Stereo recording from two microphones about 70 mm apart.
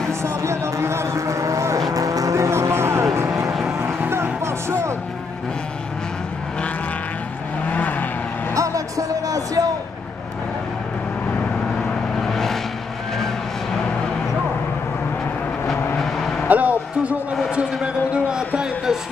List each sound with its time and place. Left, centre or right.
0.2 s a sound: right
1.9 s vehicle: right
3.8 s music: right
7.7 s vehicle: left
8.5 s music: right
12.2 s vehicle: centre
16.0 s vehicle: centre
16.4 s a sound: right